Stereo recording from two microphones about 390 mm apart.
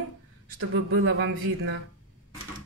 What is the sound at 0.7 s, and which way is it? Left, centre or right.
Speech, right.